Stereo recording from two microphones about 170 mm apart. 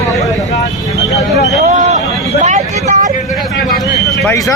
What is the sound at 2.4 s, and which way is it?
Vehicle, 40° right (ahead or behind).